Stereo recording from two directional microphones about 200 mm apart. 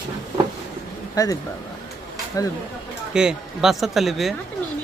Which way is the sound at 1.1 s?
15° left (ahead or behind).